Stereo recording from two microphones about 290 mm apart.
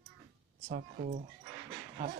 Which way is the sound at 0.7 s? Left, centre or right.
Right.